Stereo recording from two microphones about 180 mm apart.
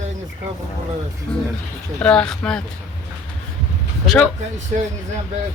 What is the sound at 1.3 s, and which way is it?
Speech, 5° left (ahead or behind).